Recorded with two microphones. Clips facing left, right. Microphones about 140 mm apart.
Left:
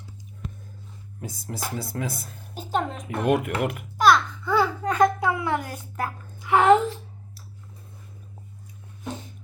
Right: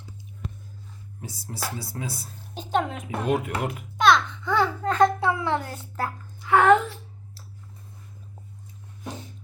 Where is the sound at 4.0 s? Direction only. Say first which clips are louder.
Left 1 dB; 5° left (ahead or behind).